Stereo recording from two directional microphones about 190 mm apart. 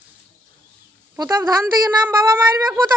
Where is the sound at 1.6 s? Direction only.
10° right (ahead or behind).